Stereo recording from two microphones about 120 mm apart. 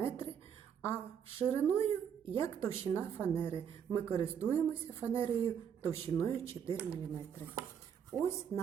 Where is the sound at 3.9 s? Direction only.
25° left (ahead or behind).